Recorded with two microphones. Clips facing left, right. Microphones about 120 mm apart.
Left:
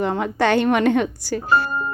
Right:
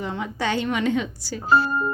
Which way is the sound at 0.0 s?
60° left (ahead or behind).